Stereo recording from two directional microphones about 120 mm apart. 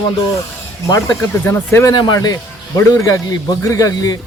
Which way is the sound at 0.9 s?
20° left (ahead or behind).